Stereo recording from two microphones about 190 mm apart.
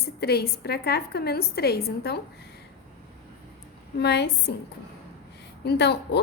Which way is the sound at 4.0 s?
60° left (ahead or behind).